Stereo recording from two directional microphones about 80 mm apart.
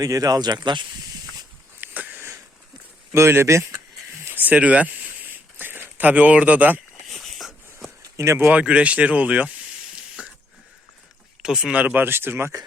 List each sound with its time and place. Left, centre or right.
0.0 s speech: right
1.8 s a sound: right
3.1 s speech: right
4.3 s a sound: right
7.1 s a sound: centre
8.1 s speech: right
8.4 s speech: centre
11.4 s speech: centre
11.8 s speech: right